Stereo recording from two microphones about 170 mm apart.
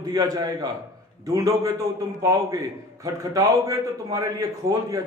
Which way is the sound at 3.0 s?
20° right (ahead or behind).